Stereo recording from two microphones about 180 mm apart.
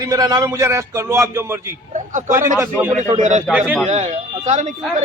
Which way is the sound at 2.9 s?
40° right (ahead or behind).